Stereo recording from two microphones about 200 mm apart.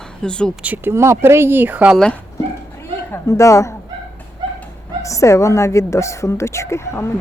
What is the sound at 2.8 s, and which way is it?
Speech, 10° left (ahead or behind).